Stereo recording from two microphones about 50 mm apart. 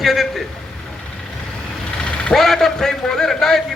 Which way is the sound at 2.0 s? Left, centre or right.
Left.